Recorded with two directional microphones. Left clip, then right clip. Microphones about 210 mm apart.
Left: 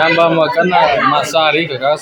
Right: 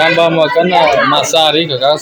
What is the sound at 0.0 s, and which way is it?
A man's voice, 5° right (ahead or behind).